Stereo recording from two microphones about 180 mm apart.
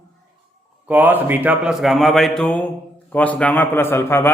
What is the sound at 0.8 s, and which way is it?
A man's voice, 10° right (ahead or behind).